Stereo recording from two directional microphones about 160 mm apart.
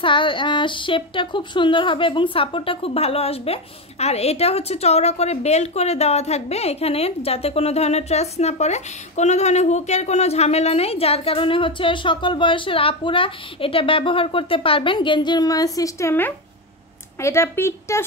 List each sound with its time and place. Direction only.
0.0 s a woman's voice: 30° left (ahead or behind); by 18.0 s 15° left (ahead or behind)